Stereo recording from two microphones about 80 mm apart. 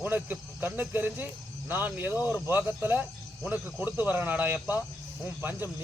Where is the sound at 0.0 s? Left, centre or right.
Right.